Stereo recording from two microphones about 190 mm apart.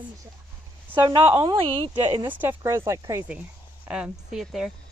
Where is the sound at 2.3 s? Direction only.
10° right (ahead or behind).